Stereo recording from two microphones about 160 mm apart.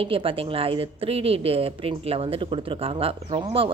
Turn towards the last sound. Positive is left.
turn(degrees=-35)  # may be behind; listen again after turning